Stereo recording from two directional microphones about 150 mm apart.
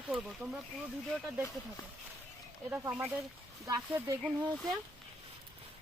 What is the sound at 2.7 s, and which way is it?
Speech, 10° right (ahead or behind).